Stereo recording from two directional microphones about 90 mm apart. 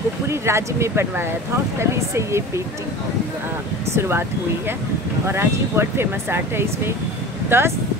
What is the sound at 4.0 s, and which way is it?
Speech, 30° right (ahead or behind).